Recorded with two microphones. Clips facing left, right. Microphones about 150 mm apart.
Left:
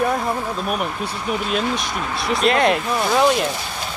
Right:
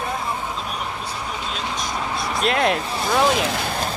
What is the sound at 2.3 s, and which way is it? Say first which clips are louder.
Speech: left 4 dB; centre (ahead or behind).